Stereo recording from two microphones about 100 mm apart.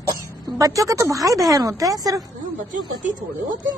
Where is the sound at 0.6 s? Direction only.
35° right (ahead or behind).